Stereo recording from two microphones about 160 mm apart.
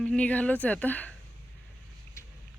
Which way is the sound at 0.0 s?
5° left (ahead or behind).